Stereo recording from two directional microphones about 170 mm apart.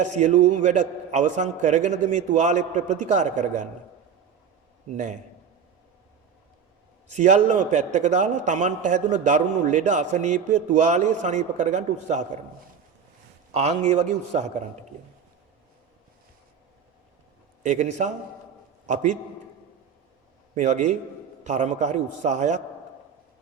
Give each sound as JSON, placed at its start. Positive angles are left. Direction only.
{"t": 0.0, "sound": "a man's voice", "side_deg": -45}
{"t": 7.1, "sound": "a man's voice", "side_deg": -45}
{"t": 13.5, "sound": "a man's voice", "side_deg": -40}
{"t": 17.6, "sound": "a man's voice", "side_deg": -45}
{"t": 20.6, "sound": "a man's voice", "side_deg": -45}